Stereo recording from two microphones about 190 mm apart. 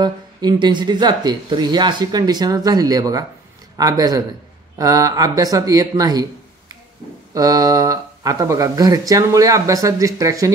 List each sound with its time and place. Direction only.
0.0 s speech: 20° right (ahead or behind)
7.3 s speech: 20° right (ahead or behind)